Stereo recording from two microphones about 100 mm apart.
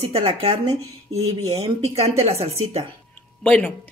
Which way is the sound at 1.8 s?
90° right.